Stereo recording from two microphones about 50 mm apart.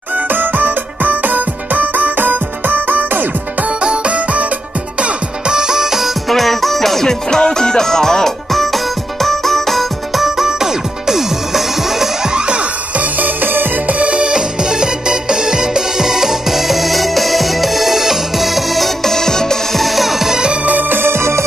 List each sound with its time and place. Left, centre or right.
0.3 s music: right
3.8 s music: right
5.0 s music: centre
6.2 s music: centre
13.2 s music: right
13.8 s music: right
20.6 s music: right
21.0 s music: right